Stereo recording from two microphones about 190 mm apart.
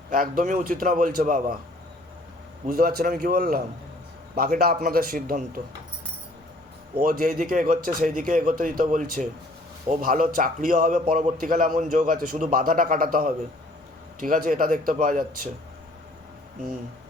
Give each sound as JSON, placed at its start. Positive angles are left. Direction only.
{"t": 0.1, "sound": "speech", "side_deg": -45}
{"t": 2.6, "sound": "speech", "side_deg": -50}
{"t": 7.0, "sound": "speech", "side_deg": -50}